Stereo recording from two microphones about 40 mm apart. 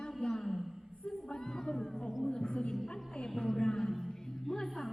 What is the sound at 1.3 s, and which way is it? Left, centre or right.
Music, centre.